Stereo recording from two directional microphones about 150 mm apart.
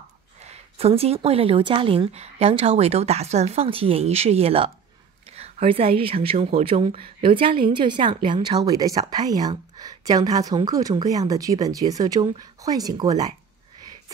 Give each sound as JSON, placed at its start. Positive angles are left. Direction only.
{"t": 0.5, "sound": "a woman's voice", "side_deg": -40}